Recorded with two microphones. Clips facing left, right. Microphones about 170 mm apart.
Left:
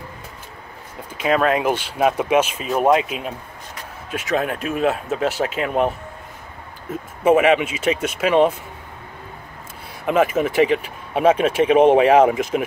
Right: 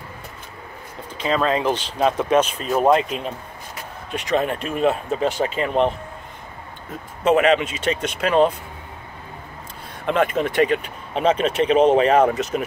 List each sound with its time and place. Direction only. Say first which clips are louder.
1.1 s speech: left 2 dB; 10° left (ahead or behind)
7.2 s speech: left 2 dB; 10° left (ahead or behind)
10.0 s speech: left 2 dB; 5° left (ahead or behind)